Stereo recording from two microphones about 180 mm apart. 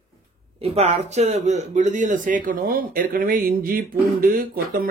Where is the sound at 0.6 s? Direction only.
35° right (ahead or behind); by 4.8 s 55° right (ahead or behind).